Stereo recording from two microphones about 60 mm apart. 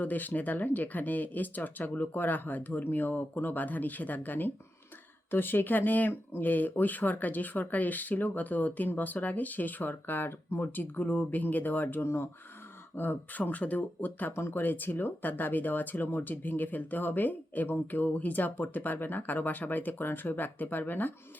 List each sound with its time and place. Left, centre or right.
0.0 s speech: left
12.0 s speech: left
13.0 s speech: left
14.3 s speech: left